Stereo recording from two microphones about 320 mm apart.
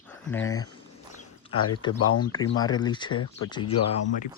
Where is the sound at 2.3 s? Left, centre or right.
Centre.